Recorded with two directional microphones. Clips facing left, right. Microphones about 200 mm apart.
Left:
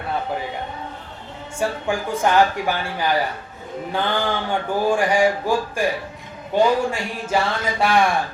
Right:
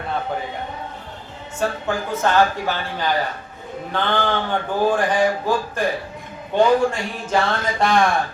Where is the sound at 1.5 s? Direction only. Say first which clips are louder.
Even; 15° left (ahead or behind).